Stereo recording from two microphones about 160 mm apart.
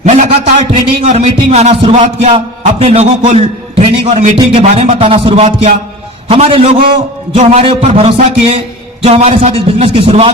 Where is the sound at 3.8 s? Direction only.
45° right (ahead or behind).